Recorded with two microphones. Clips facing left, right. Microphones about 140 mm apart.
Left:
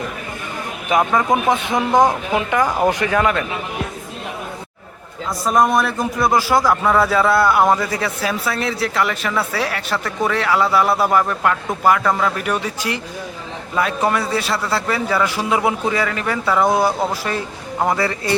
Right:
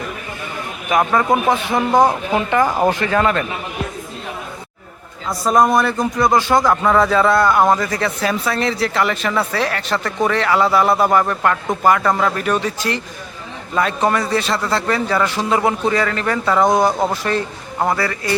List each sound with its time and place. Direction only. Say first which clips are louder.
1.3 s a man's voice: right 1 dB; 20° left (ahead or behind)
1.9 s a man's voice: right 1 dB; 5° right (ahead or behind)
2.3 s a man's voice: right 2 dB; 10° left (ahead or behind)
5.5 s a man's voice: right 2 dB; centre (ahead or behind); by 18.3 s 25° left (ahead or behind)